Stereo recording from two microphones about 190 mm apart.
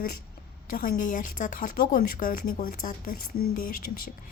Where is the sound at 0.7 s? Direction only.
45° left (ahead or behind).